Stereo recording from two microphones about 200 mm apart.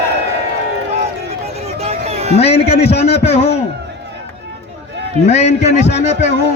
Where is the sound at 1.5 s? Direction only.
30° right (ahead or behind).